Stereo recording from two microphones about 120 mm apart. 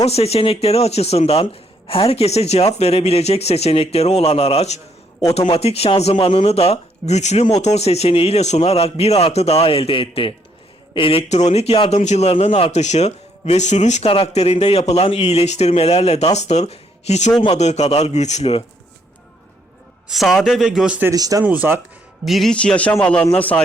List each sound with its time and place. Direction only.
0.0 s speech: 60° left (ahead or behind)
12.8 s speech: 70° left (ahead or behind)
14.1 s speech: 55° left (ahead or behind)
20.1 s a man's voice: centre (ahead or behind)
21.1 s speech: 30° right (ahead or behind)
21.4 s speech: 15° right (ahead or behind)
22.2 s a man's voice: centre (ahead or behind)